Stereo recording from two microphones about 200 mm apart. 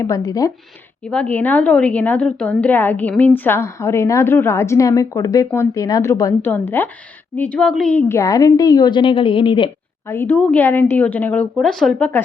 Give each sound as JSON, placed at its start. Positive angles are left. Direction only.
{"t": 0.0, "sound": "a woman's voice", "side_deg": 15}
{"t": 1.0, "sound": "a woman's voice", "side_deg": 5}
{"t": 10.1, "sound": "a woman's voice", "side_deg": 10}